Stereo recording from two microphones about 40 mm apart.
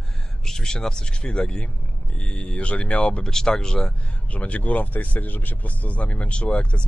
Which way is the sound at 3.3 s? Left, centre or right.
Centre.